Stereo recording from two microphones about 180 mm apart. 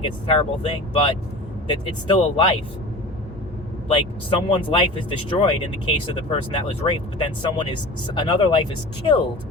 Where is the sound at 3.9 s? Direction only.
30° left (ahead or behind).